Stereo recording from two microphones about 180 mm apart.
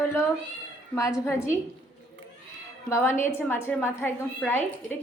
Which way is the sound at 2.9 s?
15° left (ahead or behind).